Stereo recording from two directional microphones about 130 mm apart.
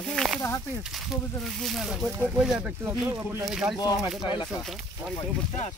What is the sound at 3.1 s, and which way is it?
Speech, 20° right (ahead or behind).